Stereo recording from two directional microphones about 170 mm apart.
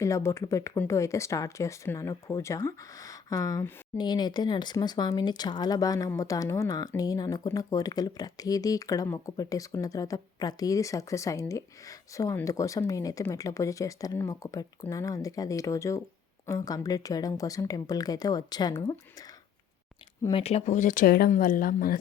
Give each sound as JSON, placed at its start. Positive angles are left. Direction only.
{"t": 0.0, "sound": "speech", "side_deg": 15}
{"t": 20.3, "sound": "speech", "side_deg": 35}